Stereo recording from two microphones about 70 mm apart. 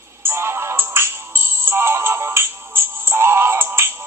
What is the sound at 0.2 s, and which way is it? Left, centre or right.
Music, right.